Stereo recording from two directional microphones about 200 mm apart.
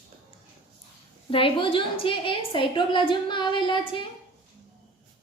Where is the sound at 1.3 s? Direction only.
25° left (ahead or behind).